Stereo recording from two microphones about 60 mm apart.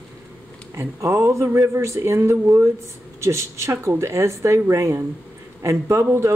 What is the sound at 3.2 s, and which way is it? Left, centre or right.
Speech, right.